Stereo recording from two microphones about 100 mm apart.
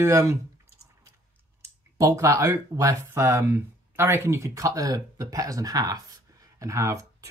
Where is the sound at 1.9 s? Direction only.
35° right (ahead or behind).